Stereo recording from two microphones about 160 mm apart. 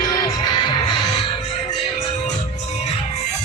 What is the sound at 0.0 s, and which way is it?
Music, 25° left (ahead or behind).